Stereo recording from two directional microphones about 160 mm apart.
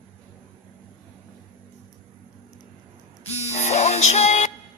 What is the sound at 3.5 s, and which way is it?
Music, 45° left (ahead or behind).